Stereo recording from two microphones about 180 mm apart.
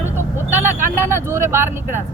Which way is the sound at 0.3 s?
10° right (ahead or behind).